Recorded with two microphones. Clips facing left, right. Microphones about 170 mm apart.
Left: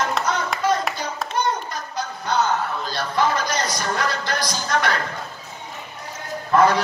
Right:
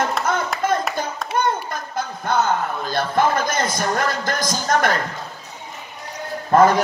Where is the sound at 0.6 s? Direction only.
50° right (ahead or behind).